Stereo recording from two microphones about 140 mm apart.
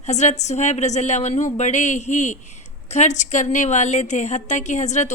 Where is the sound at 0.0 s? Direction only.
55° left (ahead or behind).